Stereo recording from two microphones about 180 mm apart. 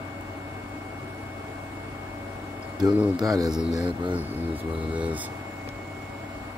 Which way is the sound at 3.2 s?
20° right (ahead or behind).